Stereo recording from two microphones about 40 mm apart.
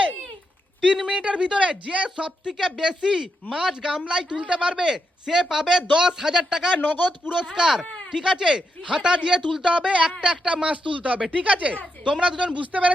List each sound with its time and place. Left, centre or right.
1.2 s speech: right
2.5 s speech: centre
4.4 s speech: right
6.7 s speech: left
7.3 s a woman's voice: centre; by 11.8 s right
12.2 s speech: centre
12.5 s a woman's voice: right